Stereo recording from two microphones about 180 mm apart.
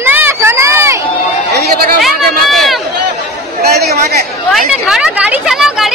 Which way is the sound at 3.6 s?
60° right (ahead or behind).